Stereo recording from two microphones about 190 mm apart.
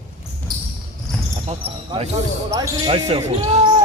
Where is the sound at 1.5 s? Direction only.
30° right (ahead or behind).